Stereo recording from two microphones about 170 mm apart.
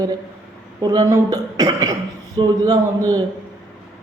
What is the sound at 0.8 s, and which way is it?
A man's voice, 20° right (ahead or behind).